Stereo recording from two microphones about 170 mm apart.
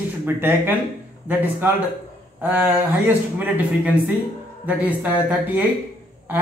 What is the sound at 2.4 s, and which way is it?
Speech, 10° right (ahead or behind).